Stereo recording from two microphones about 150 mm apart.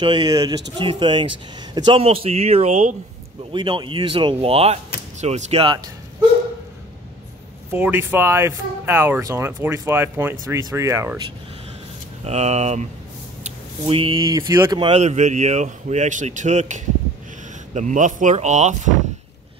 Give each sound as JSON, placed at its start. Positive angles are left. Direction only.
{"t": 0.0, "sound": "speech", "side_deg": -30}
{"t": 3.5, "sound": "speech", "side_deg": -30}
{"t": 7.7, "sound": "speech", "side_deg": -15}
{"t": 12.3, "sound": "speech", "side_deg": -45}
{"t": 14.9, "sound": "speech", "side_deg": -50}